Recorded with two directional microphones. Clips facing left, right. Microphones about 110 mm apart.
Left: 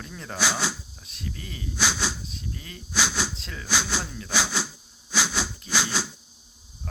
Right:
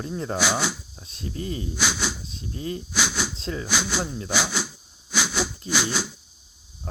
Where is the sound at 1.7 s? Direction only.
15° right (ahead or behind).